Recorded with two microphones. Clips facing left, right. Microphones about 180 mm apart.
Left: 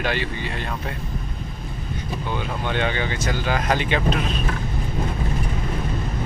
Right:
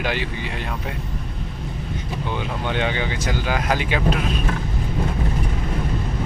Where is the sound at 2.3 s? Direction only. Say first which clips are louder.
Even; 15° right (ahead or behind).